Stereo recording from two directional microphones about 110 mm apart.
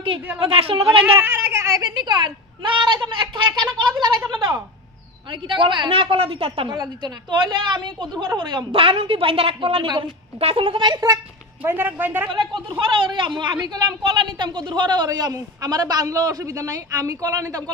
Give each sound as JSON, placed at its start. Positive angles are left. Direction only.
{"t": 0.4, "sound": "a woman's voice", "side_deg": -55}
{"t": 1.2, "sound": "speech", "side_deg": -20}
{"t": 1.8, "sound": "a woman's voice", "side_deg": -45}
{"t": 6.7, "sound": "a woman's voice", "side_deg": -40}
{"t": 11.6, "sound": "speech", "side_deg": -15}
{"t": 12.3, "sound": "a woman's voice", "side_deg": -45}